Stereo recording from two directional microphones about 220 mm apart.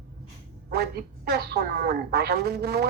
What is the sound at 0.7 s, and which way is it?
A woman's voice, 45° right (ahead or behind).